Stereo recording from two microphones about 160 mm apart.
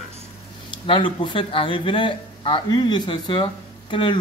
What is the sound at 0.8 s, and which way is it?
Speech, 30° left (ahead or behind).